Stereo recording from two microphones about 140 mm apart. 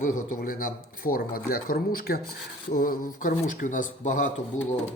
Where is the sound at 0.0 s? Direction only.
85° left; by 4.3 s 70° left (ahead or behind).